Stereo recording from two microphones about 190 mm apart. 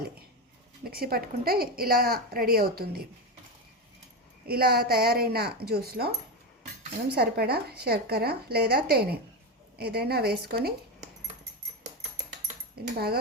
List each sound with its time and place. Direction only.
0.9 s a woman's voice: 50° right (ahead or behind)
4.4 s a woman's voice: 55° right (ahead or behind)
12.5 s dishes: 55° right (ahead or behind)